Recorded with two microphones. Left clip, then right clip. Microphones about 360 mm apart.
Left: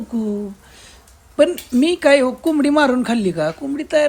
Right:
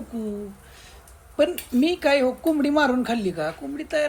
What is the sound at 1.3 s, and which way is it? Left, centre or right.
A woman's voice, centre.